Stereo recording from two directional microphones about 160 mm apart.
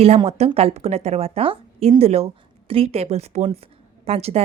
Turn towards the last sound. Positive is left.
turn(degrees=-40)  # may be behind; listen again after turning